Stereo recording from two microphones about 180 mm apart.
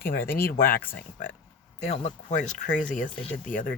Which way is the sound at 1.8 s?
35° left (ahead or behind).